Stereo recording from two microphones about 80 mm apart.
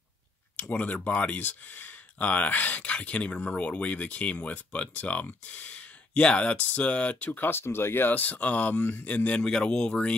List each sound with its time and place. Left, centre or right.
0.6 s speech: centre